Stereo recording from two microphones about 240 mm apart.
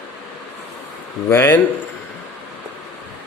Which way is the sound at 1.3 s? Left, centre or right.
Centre.